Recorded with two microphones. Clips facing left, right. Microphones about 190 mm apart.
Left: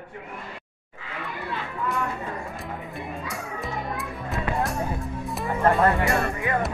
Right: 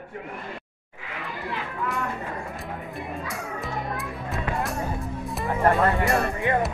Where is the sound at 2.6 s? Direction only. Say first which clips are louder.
Even; centre (ahead or behind).